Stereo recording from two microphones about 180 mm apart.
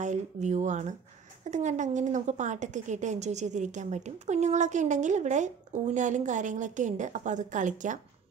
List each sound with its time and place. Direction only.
0.0 s a woman's voice: 40° right (ahead or behind)